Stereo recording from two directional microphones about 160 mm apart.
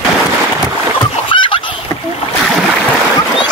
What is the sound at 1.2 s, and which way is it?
Fowl, 30° left (ahead or behind).